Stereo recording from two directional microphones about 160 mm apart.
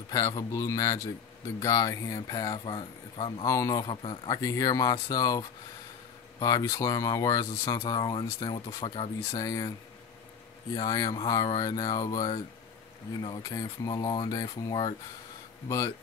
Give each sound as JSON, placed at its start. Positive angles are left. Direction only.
{"t": 0.1, "sound": "speech", "side_deg": 20}
{"t": 3.4, "sound": "speech", "side_deg": 20}
{"t": 4.3, "sound": "speech", "side_deg": 20}
{"t": 9.4, "sound": "speech", "side_deg": 25}
{"t": 10.8, "sound": "speech", "side_deg": 20}